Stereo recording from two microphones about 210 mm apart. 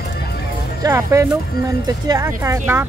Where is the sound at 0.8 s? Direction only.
15° right (ahead or behind).